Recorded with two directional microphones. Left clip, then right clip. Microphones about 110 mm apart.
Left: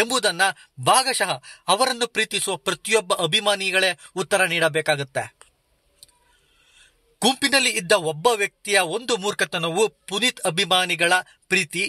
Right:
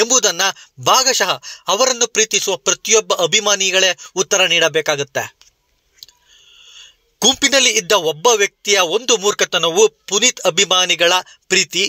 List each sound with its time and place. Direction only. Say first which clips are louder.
0.2 s speech: right 4 dB; 20° right (ahead or behind)
7.2 s speech: right 6 dB; 15° right (ahead or behind)